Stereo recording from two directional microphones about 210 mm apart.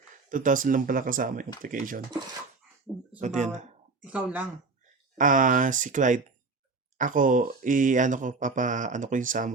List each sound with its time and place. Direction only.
0.3 s speech: 40° right (ahead or behind)
3.2 s speech: 35° right (ahead or behind)
4.0 s speech: 5° right (ahead or behind)
5.1 s speech: 40° right (ahead or behind)